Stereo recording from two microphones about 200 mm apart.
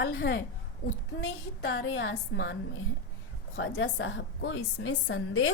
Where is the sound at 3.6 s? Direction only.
70° left (ahead or behind).